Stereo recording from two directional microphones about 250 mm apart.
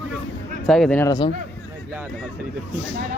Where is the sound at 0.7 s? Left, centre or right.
Centre.